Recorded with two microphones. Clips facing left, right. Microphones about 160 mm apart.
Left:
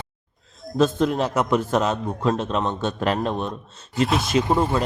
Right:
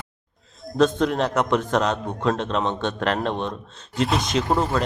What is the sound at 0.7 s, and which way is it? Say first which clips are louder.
A man's voice: even; 5° left (ahead or behind).